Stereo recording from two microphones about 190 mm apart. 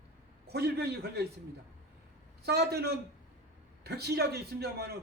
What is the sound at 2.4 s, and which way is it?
A man's voice, 55° right (ahead or behind).